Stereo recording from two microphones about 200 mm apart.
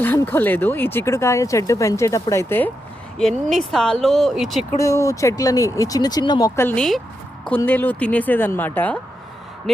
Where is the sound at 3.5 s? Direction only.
Centre (ahead or behind).